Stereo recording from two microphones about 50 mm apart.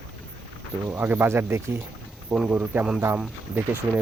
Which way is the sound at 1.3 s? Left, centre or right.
Right.